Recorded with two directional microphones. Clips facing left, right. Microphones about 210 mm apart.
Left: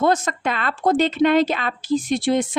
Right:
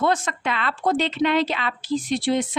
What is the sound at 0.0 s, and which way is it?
A woman's voice, 40° left (ahead or behind).